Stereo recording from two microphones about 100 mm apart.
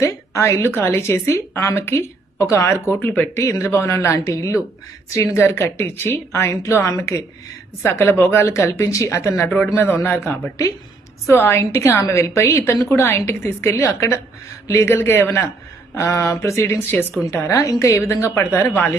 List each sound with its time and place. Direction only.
0.0 s a woman's voice: 30° left (ahead or behind)
11.3 s a woman's voice: 25° left (ahead or behind)